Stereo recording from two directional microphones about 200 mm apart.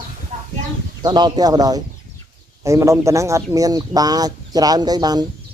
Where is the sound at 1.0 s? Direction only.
20° right (ahead or behind).